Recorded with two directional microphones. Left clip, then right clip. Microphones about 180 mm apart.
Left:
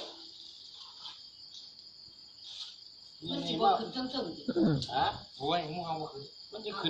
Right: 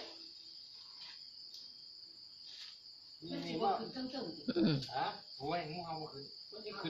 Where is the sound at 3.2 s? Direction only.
20° right (ahead or behind).